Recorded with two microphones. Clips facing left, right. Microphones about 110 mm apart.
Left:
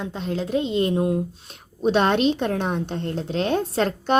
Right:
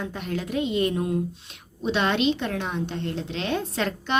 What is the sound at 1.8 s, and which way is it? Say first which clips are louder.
A woman's voice: left 4 dB; 45° left (ahead or behind).